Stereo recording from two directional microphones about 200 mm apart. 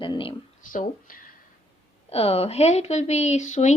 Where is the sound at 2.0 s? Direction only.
30° left (ahead or behind).